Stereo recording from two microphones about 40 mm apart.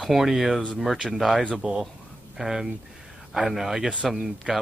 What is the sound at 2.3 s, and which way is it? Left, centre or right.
Speech, centre.